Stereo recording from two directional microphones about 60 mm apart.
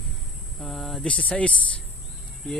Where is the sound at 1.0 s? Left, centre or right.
Centre.